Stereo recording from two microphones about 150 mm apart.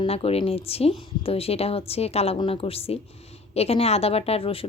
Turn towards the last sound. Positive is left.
turn(degrees=40)  # may be behind; listen again after turning